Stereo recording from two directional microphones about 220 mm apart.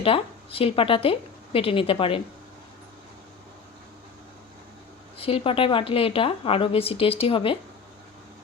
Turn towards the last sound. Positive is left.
turn(degrees=25)  # may be behind; listen again after turning